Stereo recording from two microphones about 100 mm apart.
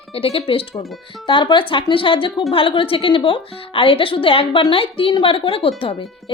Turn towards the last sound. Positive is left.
turn(degrees=70)  # may be behind; listen again after turning